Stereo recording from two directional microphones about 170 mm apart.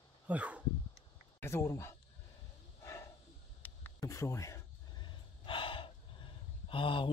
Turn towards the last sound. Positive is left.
turn(degrees=30)  # may be behind; listen again after turning